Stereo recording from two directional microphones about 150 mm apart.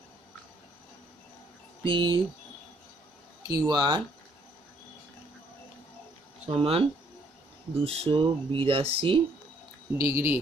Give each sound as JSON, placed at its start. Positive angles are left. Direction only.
{"t": 1.9, "sound": "speech", "side_deg": -30}
{"t": 3.4, "sound": "speech", "side_deg": -25}
{"t": 6.5, "sound": "speech", "side_deg": -40}
{"t": 7.8, "sound": "speech", "side_deg": -40}
{"t": 9.9, "sound": "speech", "side_deg": -20}